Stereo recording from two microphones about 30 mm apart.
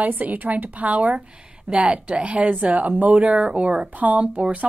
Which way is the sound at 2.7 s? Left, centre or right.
Right.